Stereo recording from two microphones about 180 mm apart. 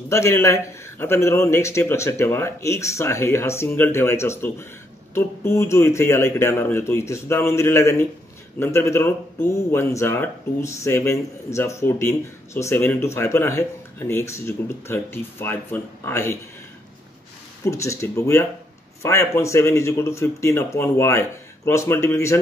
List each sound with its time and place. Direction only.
0.1 s speech: 15° left (ahead or behind)
17.6 s speech: 15° left (ahead or behind)